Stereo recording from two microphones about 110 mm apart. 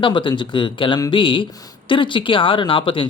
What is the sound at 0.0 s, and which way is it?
Speech, 45° left (ahead or behind).